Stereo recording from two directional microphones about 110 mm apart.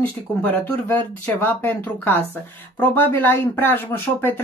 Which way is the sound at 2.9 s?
20° left (ahead or behind).